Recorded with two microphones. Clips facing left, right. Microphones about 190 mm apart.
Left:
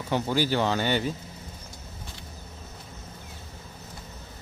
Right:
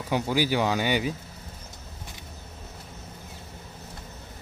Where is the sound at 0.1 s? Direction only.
10° right (ahead or behind).